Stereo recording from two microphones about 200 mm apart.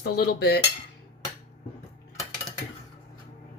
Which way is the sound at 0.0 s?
55° left (ahead or behind).